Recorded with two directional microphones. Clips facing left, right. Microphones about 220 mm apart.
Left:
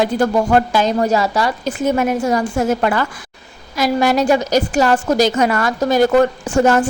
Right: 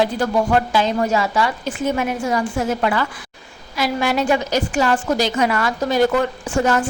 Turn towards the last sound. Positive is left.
turn(degrees=45)  # may be behind; listen again after turning